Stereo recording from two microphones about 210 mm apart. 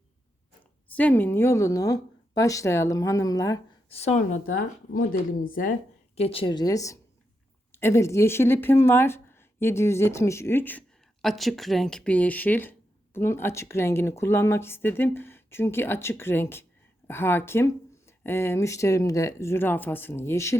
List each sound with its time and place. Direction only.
0.9 s speech: 10° left (ahead or behind)
3.8 s speech: 30° left (ahead or behind)
4.4 s speech: 70° left (ahead or behind)
5.4 s speech: 40° left (ahead or behind)
6.1 s speech: 25° left (ahead or behind)